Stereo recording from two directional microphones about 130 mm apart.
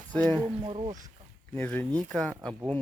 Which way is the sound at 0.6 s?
40° right (ahead or behind).